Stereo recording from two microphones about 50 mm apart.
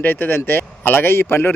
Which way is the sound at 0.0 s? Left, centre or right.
Left.